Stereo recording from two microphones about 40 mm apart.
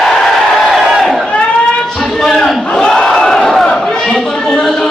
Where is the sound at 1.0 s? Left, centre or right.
Centre.